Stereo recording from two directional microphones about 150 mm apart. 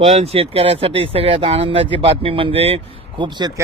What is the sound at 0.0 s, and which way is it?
Speech, 40° right (ahead or behind).